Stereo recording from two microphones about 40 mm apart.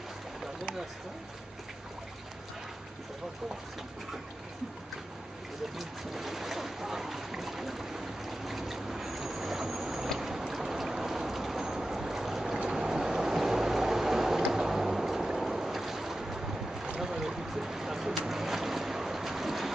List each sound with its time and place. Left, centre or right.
5.8 s speech: centre
10.1 s vehicle: centre
17.0 s boat: centre